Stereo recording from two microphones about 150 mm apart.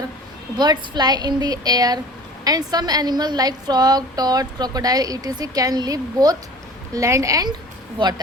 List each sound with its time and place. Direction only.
0.5 s a woman's voice: 30° right (ahead or behind)